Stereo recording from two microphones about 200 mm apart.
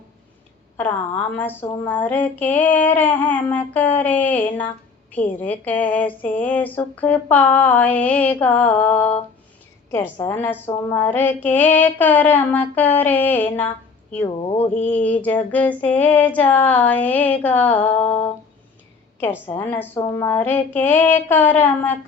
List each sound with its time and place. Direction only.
0.8 s speech: 10° left (ahead or behind)
14.3 s speech: 30° left (ahead or behind)
14.8 s speech: 5° left (ahead or behind)
19.5 s speech: 10° left (ahead or behind)